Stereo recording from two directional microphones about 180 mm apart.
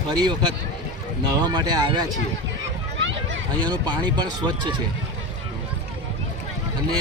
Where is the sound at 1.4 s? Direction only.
25° right (ahead or behind).